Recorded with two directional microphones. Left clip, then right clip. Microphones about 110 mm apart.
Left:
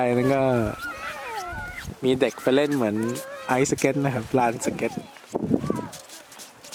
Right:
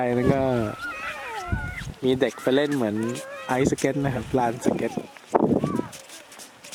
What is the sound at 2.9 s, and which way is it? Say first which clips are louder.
Speech: left 1 dB; 15° left (ahead or behind).